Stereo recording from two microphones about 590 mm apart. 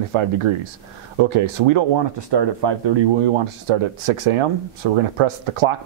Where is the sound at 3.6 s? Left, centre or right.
Right.